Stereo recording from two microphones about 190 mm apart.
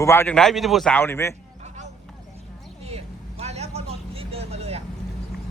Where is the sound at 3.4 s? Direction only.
35° right (ahead or behind).